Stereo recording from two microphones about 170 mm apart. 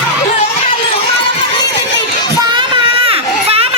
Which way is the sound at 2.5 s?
30° right (ahead or behind).